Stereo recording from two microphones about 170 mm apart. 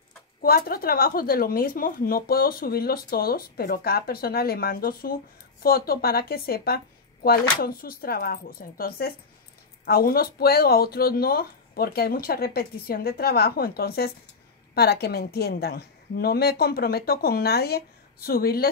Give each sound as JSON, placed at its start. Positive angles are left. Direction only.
{"t": 0.4, "sound": "a woman's voice", "side_deg": 60}